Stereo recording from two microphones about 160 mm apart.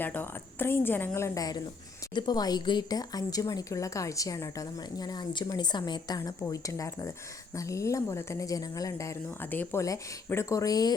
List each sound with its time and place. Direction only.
0.0 s a woman's voice: 10° left (ahead or behind)